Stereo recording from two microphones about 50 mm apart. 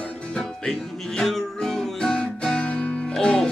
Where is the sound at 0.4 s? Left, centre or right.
Centre.